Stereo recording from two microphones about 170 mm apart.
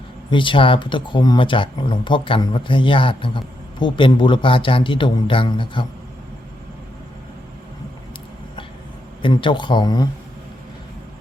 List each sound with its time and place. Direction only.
0.3 s speech: 30° left (ahead or behind)
9.2 s speech: 30° left (ahead or behind)